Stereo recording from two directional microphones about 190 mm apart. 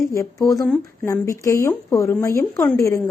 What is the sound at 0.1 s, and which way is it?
A woman's voice, 15° left (ahead or behind).